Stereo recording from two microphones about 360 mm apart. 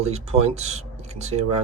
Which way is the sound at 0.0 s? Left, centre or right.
Centre.